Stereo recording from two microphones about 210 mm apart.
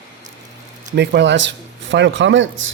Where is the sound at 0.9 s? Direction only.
55° right (ahead or behind).